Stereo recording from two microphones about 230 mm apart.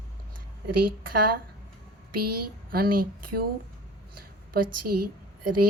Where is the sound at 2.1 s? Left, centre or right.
Right.